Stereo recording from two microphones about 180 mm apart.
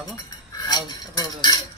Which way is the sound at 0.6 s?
20° left (ahead or behind).